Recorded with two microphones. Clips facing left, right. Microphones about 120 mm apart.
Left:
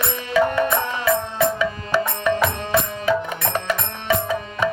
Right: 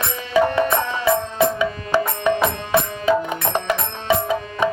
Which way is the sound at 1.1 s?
20° right (ahead or behind).